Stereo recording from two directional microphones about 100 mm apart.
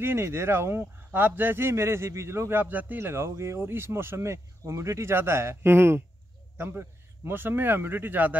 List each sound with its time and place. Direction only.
0.0 s speech: 25° right (ahead or behind)